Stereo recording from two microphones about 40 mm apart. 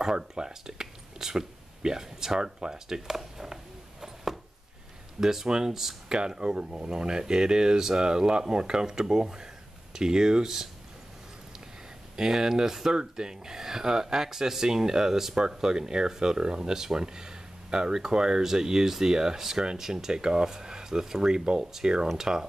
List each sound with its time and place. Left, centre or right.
0.0 s speech: centre
4.0 s a sound: centre
5.2 s speech: centre
12.2 s speech: centre